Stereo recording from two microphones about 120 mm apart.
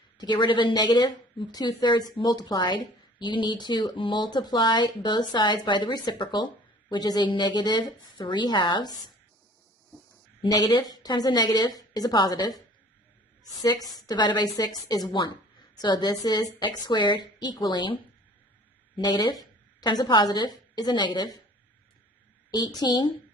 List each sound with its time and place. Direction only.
0.2 s a woman's voice: 40° left (ahead or behind)
10.4 s a woman's voice: 40° left (ahead or behind)
18.9 s a woman's voice: 40° left (ahead or behind)
22.5 s a woman's voice: 35° left (ahead or behind)